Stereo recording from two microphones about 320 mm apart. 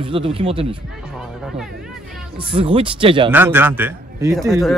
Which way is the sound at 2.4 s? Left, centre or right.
Centre.